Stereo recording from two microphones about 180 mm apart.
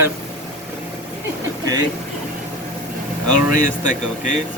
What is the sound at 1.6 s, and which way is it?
Speech, 20° right (ahead or behind).